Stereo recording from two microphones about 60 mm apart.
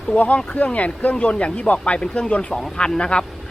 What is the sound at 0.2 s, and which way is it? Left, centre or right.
A man's voice, left.